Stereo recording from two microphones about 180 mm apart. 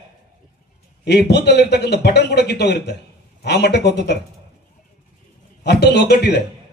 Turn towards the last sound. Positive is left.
turn(degrees=65)  # may be behind; listen again after turning